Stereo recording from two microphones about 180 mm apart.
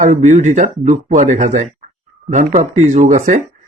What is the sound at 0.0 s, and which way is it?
Speech, 40° right (ahead or behind).